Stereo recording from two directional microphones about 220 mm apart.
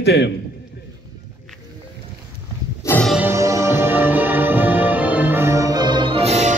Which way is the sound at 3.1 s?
10° right (ahead or behind).